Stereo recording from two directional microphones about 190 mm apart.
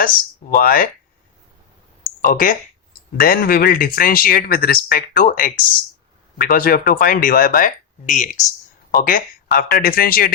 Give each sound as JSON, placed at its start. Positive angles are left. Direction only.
{"t": 0.5, "sound": "speech", "side_deg": 50}
{"t": 2.0, "sound": "speech", "side_deg": 50}